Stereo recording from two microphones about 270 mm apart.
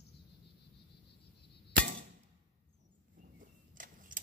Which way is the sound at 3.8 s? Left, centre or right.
Right.